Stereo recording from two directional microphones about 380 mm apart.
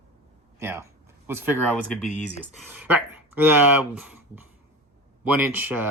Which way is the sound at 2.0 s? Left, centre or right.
Centre.